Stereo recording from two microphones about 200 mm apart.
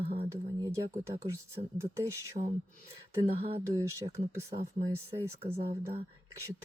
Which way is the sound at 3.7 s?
15° right (ahead or behind).